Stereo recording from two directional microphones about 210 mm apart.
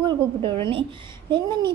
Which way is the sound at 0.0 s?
25° right (ahead or behind).